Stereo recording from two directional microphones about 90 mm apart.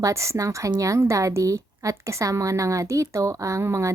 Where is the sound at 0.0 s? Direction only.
35° right (ahead or behind).